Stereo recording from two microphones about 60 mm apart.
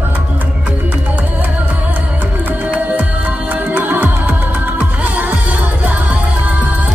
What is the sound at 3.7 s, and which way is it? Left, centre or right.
Music, right.